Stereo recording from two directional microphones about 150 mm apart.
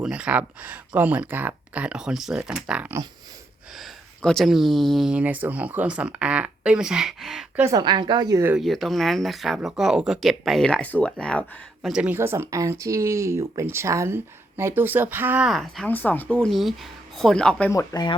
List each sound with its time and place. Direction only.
0.0 s speech: 5° right (ahead or behind)
3.8 s speech: 5° left (ahead or behind)
7.6 s a woman's voice: 25° right (ahead or behind)
8.5 s speech: centre (ahead or behind)
12.1 s speech: 15° right (ahead or behind)
15.4 s speech: centre (ahead or behind)
15.9 s speech: 10° left (ahead or behind)
17.7 s speech: 25° left (ahead or behind)